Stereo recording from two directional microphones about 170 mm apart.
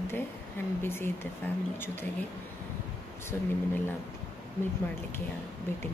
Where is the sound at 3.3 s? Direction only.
10° left (ahead or behind).